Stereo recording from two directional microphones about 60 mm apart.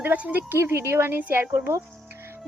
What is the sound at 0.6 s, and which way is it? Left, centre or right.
Speech, right.